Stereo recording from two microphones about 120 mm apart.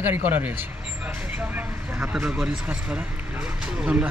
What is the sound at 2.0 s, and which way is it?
Speech, 5° right (ahead or behind).